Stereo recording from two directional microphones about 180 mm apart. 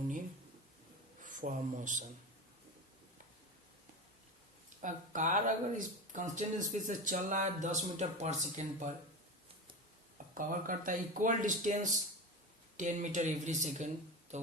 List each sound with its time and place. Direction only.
1.2 s speech: 45° right (ahead or behind)
4.8 s speech: 45° right (ahead or behind)
10.3 s speech: 50° right (ahead or behind)
14.3 s a sound: 40° right (ahead or behind)